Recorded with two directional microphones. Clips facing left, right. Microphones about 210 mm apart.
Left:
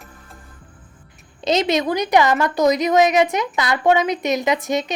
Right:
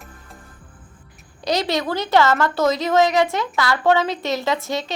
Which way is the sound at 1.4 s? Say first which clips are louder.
Left 3 dB; 20° left (ahead or behind).